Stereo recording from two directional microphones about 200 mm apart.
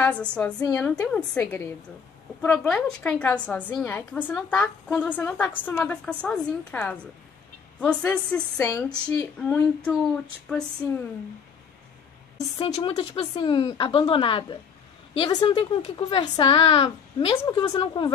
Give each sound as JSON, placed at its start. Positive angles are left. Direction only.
{"t": 0.0, "sound": "a woman's voice", "side_deg": 5}
{"t": 12.5, "sound": "speech", "side_deg": 25}